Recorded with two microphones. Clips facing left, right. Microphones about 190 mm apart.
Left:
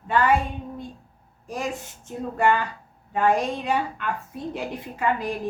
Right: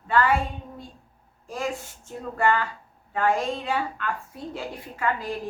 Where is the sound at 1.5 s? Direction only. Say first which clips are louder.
Even; 20° left (ahead or behind).